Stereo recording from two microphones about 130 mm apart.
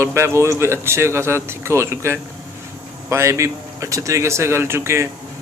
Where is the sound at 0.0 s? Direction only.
20° right (ahead or behind).